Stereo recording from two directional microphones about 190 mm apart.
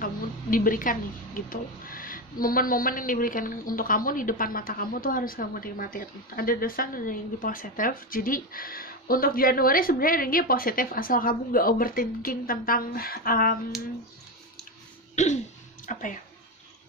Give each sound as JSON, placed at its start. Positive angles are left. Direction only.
{"t": 0.0, "sound": "a woman's voice", "side_deg": 45}
{"t": 15.1, "sound": "speech", "side_deg": 40}